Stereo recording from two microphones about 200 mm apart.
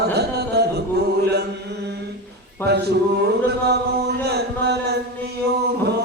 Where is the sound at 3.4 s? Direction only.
55° right (ahead or behind).